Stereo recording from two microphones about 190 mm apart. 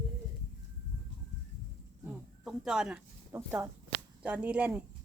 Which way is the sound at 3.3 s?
15° right (ahead or behind).